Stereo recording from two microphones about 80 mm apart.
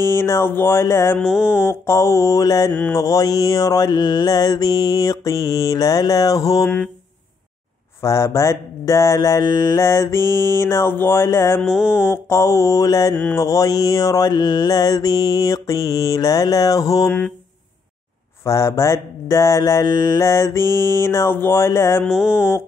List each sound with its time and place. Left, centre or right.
0.0 s speech: left
1.2 s mantra: centre
1.6 s speech: left
2.9 s mantra: left
8.0 s speech: left
11.6 s mantra: centre
12.0 s speech: left
13.1 s a sound: centre
13.4 s mantra: left
18.4 s speech: left
22.0 s mantra: centre
22.3 s speech: left